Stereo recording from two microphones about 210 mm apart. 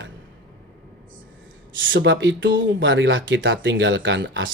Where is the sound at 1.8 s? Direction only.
60° right (ahead or behind).